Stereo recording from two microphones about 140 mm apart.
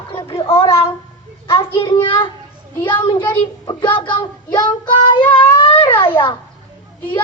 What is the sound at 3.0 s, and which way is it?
Child singing, 30° left (ahead or behind).